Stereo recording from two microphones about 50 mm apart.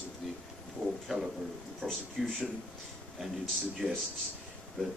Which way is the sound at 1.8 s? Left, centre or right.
Right.